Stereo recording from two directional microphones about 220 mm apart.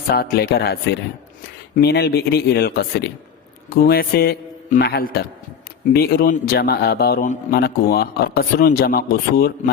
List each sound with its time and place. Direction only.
0.1 s a man's voice: 45° left (ahead or behind)